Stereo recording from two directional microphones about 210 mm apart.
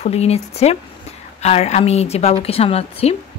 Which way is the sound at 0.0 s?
30° left (ahead or behind).